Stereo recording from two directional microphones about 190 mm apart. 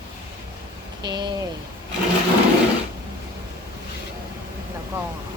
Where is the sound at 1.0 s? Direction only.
25° right (ahead or behind).